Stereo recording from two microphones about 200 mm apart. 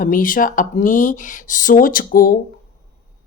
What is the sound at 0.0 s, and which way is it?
Speech, 45° left (ahead or behind).